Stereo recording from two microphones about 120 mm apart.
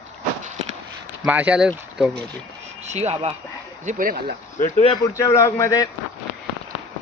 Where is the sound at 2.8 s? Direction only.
65° right (ahead or behind).